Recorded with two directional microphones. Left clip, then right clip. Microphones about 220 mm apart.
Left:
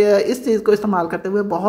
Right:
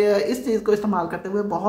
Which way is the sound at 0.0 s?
25° left (ahead or behind).